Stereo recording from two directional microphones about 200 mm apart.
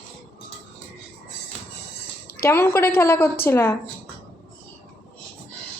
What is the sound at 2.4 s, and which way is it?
A woman's voice, 10° left (ahead or behind).